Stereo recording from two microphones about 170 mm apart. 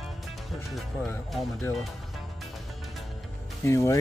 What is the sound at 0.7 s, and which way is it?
Music, 5° left (ahead or behind).